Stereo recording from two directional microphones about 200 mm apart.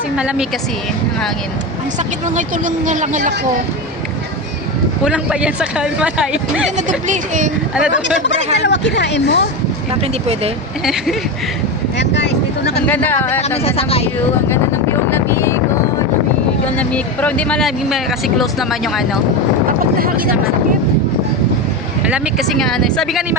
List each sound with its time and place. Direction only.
0.2 s speech: 5° right (ahead or behind)
2.3 s speech: 40° right (ahead or behind)
5.0 s speech: 5° right (ahead or behind)
6.7 s speech: 40° right (ahead or behind)
7.9 s speech: 60° left (ahead or behind)
9.9 s speech: 30° right (ahead or behind)
11.9 s speech: 60° left (ahead or behind)
12.9 s speech: 10° left (ahead or behind)
13.7 s speech: 30° left (ahead or behind)
15.1 s vehicle: 10° left (ahead or behind)
16.7 s speech: 5° left (ahead or behind)
22.0 s speech: 5° right (ahead or behind)